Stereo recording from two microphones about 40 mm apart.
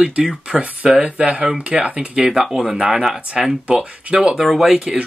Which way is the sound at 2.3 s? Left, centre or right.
Centre.